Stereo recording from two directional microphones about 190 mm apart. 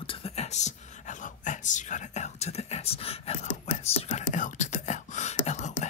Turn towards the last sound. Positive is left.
turn(degrees=35)  # may be behind; listen again after turning